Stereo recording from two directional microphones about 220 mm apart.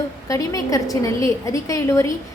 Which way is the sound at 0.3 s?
15° left (ahead or behind).